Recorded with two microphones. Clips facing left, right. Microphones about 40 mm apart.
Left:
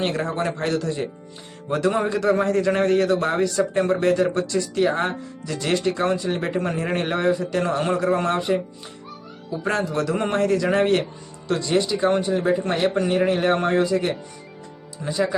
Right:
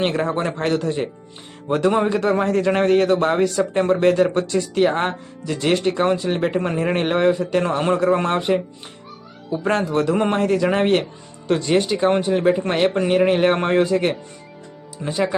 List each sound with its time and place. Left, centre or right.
0.0 s a man's voice: right
6.9 s speech: right
10.2 s a man's voice: right